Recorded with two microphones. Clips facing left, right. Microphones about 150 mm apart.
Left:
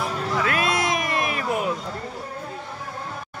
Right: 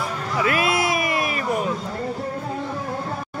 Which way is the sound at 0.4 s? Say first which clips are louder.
Right 4 dB; 5° right (ahead or behind).